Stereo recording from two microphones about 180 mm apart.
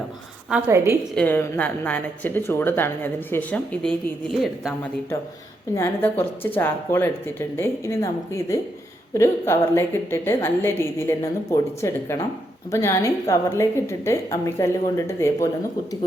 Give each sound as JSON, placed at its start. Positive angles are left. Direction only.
{"t": 0.5, "sound": "a woman's voice", "side_deg": -15}
{"t": 1.1, "sound": "speech", "side_deg": 10}
{"t": 5.7, "sound": "speech", "side_deg": 15}